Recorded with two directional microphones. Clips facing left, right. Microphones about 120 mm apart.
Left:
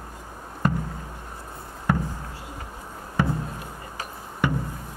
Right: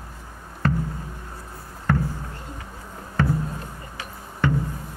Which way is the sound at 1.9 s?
15° left (ahead or behind).